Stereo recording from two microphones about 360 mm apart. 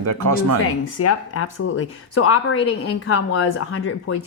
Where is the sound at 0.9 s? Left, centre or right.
Left.